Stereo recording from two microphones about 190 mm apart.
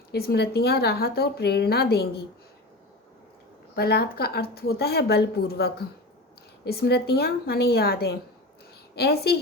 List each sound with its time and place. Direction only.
0.1 s speech: 60° left (ahead or behind)
3.8 s speech: 55° left (ahead or behind)